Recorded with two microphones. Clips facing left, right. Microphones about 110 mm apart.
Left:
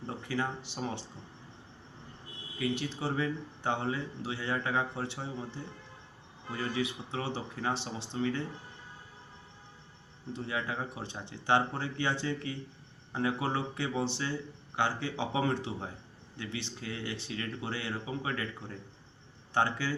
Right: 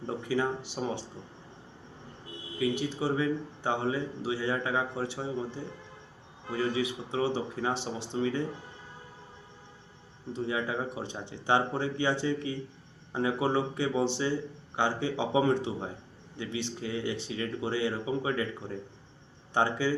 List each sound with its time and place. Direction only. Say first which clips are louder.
0.3 s speech: right 5 dB; 10° right (ahead or behind)
2.6 s speech: right 4 dB; 10° right (ahead or behind)
10.3 s speech: right 4 dB; 15° right (ahead or behind)